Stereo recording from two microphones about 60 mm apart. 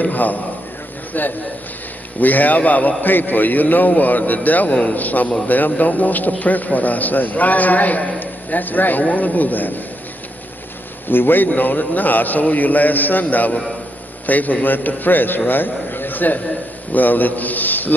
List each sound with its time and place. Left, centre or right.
0.0 s a man's voice: left
11.1 s a man's voice: left